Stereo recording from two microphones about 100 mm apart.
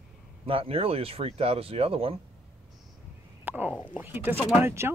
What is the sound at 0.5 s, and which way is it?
Speech, 65° right (ahead or behind).